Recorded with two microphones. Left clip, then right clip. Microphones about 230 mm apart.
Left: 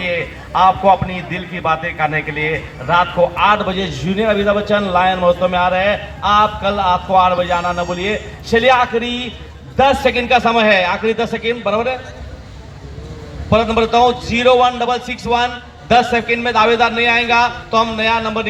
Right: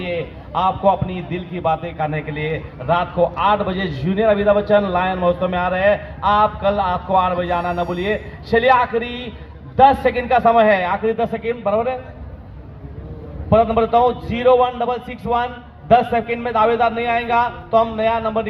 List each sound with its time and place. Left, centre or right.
0.5 s a man's voice: right
13.5 s a man's voice: right